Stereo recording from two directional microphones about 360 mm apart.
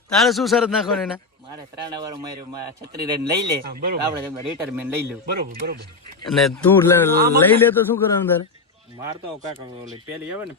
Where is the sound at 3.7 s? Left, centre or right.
Right.